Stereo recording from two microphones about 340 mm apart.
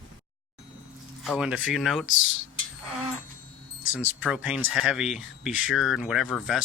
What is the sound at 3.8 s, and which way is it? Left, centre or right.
Speech, left.